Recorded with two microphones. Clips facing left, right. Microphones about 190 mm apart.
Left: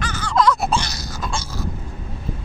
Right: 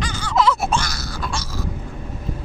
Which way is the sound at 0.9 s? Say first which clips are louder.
Even; 20° left (ahead or behind).